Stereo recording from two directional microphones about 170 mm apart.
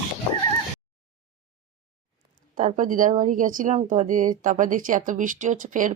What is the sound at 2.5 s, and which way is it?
A woman's voice, 50° right (ahead or behind).